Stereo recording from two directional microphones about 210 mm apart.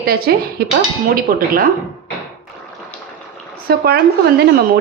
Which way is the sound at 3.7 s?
50° right (ahead or behind).